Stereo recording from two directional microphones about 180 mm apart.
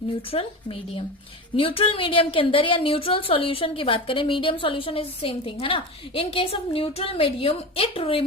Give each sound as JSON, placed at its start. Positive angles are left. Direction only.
{"t": 0.3, "sound": "a woman's voice", "side_deg": 30}